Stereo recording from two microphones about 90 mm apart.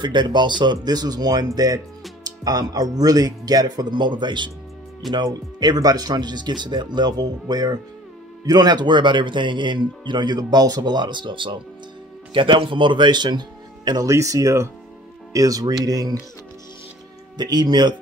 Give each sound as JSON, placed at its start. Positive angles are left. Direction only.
{"t": 0.0, "sound": "speech", "side_deg": -60}
{"t": 14.0, "sound": "speech", "side_deg": -35}
{"t": 17.4, "sound": "speech", "side_deg": -50}